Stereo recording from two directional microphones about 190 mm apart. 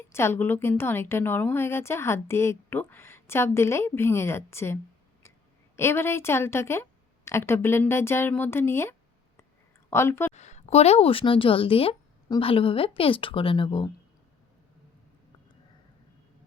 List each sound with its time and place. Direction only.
0.1 s a woman's voice: 15° left (ahead or behind)
10.3 s a woman's voice: 35° left (ahead or behind)